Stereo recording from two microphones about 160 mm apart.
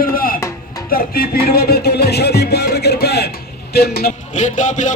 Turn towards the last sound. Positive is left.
turn(degrees=50)  # may be behind; listen again after turning